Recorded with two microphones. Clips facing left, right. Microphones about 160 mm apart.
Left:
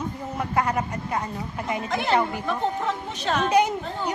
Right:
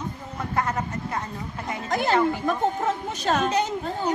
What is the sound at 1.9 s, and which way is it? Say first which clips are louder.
A woman's voice: right 3 dB; 40° right (ahead or behind).